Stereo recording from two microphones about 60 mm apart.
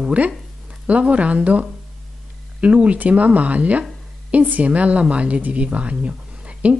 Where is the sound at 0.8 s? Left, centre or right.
Right.